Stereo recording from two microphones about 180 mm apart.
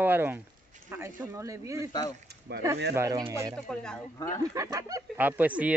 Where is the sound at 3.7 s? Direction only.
5° left (ahead or behind).